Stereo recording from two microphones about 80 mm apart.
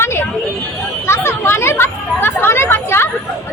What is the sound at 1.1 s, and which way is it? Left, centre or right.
Chatter, left.